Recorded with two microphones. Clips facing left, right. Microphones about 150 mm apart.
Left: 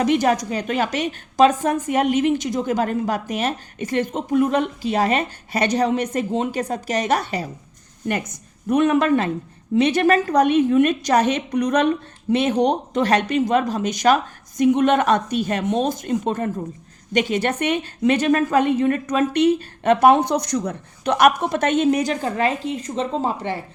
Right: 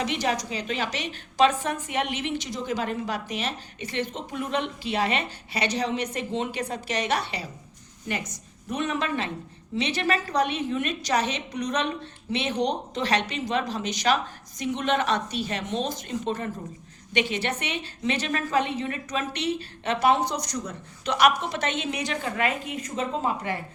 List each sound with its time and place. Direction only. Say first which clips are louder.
0.0 s a woman's voice: left 9 dB; 50° left (ahead or behind); by 23.6 s 30° left (ahead or behind)